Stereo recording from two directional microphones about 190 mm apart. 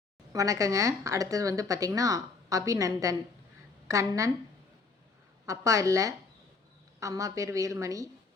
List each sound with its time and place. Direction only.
0.3 s speech: 15° right (ahead or behind)
5.5 s speech: 15° right (ahead or behind)